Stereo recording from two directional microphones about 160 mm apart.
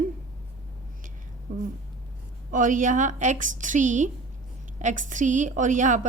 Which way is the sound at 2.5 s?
55° right (ahead or behind).